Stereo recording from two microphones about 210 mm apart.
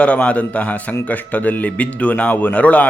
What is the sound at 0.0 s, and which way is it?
A man's voice, 5° left (ahead or behind).